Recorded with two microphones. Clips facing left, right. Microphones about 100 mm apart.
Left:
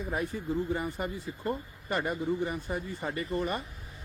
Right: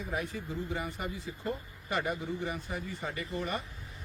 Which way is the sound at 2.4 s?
50° left (ahead or behind).